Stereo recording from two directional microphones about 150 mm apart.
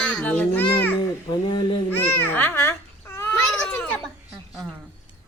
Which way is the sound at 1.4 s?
30° left (ahead or behind).